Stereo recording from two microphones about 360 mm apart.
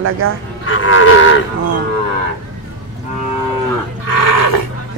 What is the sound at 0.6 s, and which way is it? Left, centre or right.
Livestock, left.